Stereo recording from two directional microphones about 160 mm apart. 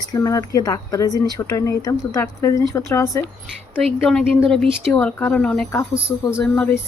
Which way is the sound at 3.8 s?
Centre (ahead or behind).